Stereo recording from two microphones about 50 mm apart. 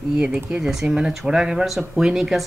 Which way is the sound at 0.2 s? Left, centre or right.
Centre.